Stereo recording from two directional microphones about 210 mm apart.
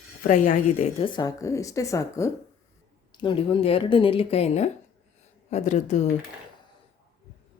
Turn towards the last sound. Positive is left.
turn(degrees=35)  # may be behind; listen again after turning